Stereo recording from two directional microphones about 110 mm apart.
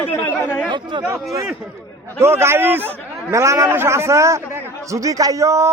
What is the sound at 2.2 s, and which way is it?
A man's voice, 25° right (ahead or behind).